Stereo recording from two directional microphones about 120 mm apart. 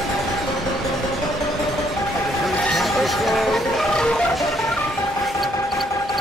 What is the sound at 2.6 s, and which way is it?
Music, centre (ahead or behind).